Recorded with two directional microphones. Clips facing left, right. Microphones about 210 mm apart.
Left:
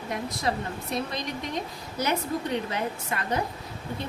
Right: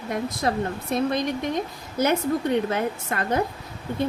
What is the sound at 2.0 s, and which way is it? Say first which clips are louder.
A woman's voice: right 6 dB; 55° right (ahead or behind).